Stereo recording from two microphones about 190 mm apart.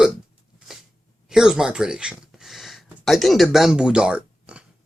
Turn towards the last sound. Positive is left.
turn(degrees=-5)  # may be behind; listen again after turning